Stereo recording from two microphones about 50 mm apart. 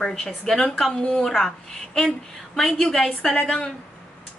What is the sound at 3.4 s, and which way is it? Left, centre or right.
Speech, centre.